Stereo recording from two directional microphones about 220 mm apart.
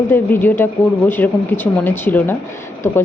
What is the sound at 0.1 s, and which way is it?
A woman's voice, 10° left (ahead or behind).